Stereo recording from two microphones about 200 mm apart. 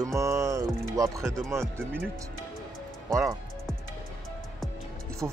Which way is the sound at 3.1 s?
15° right (ahead or behind).